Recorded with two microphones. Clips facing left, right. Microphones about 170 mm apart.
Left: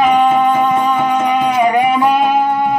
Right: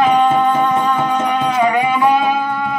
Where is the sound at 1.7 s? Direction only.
25° left (ahead or behind).